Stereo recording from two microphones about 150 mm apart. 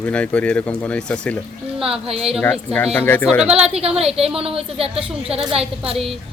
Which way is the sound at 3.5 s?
45° right (ahead or behind).